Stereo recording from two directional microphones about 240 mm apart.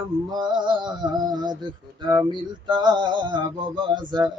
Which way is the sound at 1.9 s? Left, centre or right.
Centre.